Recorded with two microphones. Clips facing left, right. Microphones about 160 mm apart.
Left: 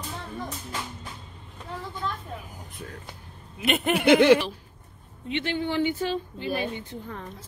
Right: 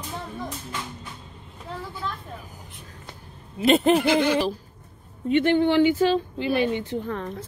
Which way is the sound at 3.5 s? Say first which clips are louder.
Right 7 dB; 30° right (ahead or behind).